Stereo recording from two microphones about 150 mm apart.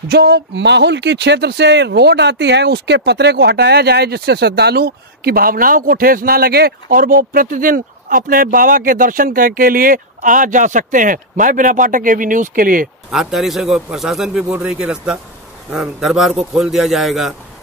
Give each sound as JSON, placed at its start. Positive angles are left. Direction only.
{"t": 0.1, "sound": "speech", "side_deg": -90}
{"t": 13.1, "sound": "a man's voice", "side_deg": 0}